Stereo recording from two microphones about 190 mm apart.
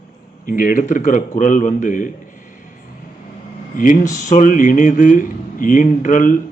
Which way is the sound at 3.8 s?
45° left (ahead or behind).